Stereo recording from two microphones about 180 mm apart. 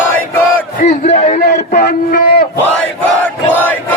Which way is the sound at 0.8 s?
40° left (ahead or behind).